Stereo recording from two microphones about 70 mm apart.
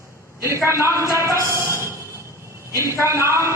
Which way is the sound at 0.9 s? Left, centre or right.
Left.